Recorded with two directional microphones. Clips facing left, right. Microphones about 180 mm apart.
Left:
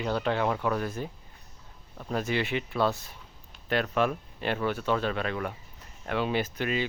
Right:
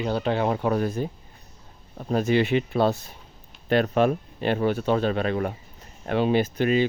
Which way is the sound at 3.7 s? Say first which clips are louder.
Right 6 dB; 35° right (ahead or behind).